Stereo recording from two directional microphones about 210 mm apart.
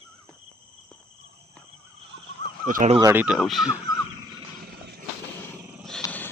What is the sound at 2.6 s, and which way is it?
Speech, 40° right (ahead or behind).